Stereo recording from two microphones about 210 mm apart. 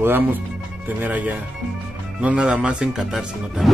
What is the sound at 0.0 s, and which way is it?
Speech, 10° right (ahead or behind).